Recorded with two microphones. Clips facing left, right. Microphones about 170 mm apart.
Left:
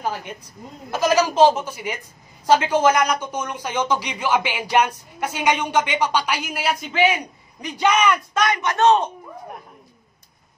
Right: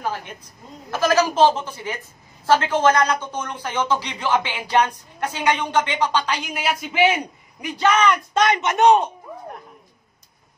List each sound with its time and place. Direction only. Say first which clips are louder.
0.9 s speech: left 1 dB; 15° left (ahead or behind)
7.7 s speech: even; 15° left (ahead or behind)
8.4 s speech: right 4 dB; 25° right (ahead or behind)